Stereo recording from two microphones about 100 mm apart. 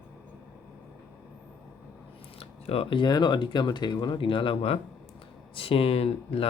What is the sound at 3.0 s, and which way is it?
Speech, 45° left (ahead or behind).